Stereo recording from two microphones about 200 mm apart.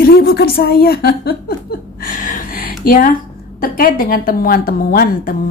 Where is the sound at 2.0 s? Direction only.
40° left (ahead or behind).